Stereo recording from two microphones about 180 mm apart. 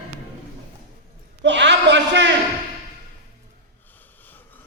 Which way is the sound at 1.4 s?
80° right.